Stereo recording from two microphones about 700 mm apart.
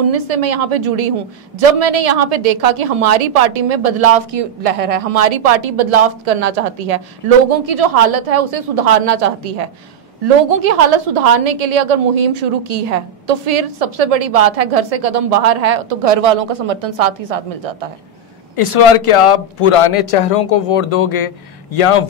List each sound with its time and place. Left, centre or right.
0.0 s a woman's voice: right
18.6 s speech: left